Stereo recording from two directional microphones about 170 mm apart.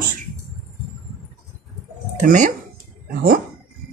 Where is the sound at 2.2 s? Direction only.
50° right (ahead or behind).